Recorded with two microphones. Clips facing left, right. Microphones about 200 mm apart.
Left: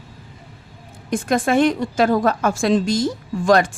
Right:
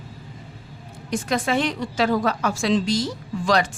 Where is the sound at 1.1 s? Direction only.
50° left (ahead or behind).